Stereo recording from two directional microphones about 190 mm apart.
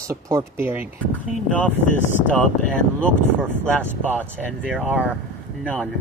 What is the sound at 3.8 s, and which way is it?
Speech, 10° right (ahead or behind).